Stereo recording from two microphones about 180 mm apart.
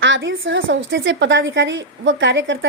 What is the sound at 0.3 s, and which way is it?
A woman's voice, 90° right.